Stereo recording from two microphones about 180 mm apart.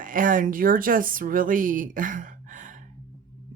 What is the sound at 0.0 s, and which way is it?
Speech, 50° right (ahead or behind).